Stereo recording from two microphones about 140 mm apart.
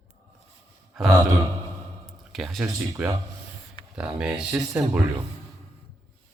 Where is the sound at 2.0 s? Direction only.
Centre (ahead or behind).